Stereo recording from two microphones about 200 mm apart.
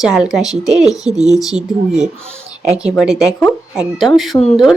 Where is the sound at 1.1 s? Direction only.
35° right (ahead or behind).